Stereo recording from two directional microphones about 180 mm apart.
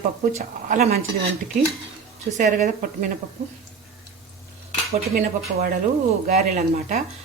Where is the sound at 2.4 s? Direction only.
45° right (ahead or behind).